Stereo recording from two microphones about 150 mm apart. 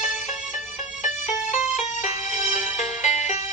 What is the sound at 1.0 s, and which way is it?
Music, 55° left (ahead or behind).